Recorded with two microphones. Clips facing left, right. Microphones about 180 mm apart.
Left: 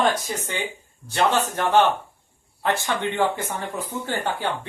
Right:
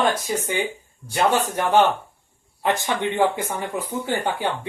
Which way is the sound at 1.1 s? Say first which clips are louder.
Right 1 dB; 10° right (ahead or behind).